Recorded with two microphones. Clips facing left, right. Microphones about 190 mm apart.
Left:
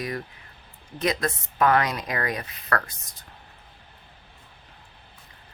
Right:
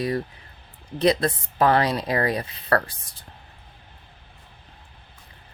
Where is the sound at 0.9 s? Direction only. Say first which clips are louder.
Right 6 dB; 35° right (ahead or behind).